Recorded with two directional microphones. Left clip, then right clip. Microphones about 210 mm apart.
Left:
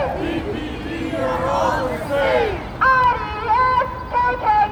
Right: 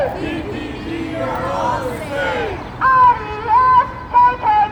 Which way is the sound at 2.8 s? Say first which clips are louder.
Right 4 dB; 30° left (ahead or behind).